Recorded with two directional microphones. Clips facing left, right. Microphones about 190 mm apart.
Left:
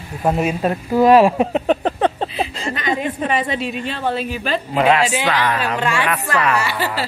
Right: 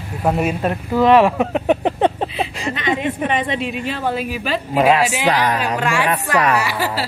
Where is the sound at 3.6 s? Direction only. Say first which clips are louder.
Right 1 dB; 5° right (ahead or behind).